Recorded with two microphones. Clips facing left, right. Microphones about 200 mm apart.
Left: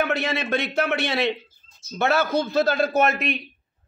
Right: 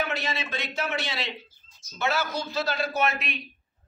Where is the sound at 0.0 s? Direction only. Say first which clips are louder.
Left 6 dB; 55° left (ahead or behind).